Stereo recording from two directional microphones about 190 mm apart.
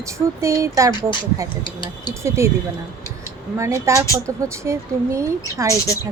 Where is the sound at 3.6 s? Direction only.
15° right (ahead or behind).